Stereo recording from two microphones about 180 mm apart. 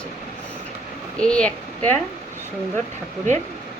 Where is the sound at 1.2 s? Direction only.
5° left (ahead or behind).